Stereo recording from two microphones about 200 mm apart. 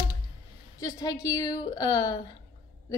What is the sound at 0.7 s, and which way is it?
A woman's voice, 15° left (ahead or behind).